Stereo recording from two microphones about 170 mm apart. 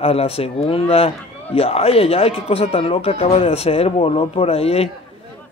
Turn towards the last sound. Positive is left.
turn(degrees=35)  # may be behind; listen again after turning